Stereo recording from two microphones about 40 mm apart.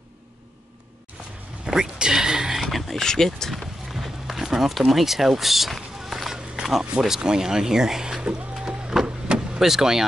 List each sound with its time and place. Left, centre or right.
1.7 s speech: centre
2.6 s a sound: centre
3.0 s speech: centre
3.5 s a sound: centre
7.2 s speech: centre
9.0 s vehicle: right
9.6 s speech: centre